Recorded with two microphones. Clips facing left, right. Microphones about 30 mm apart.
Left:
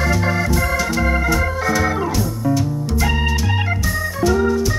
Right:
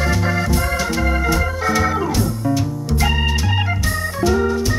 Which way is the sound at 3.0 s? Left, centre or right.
Centre.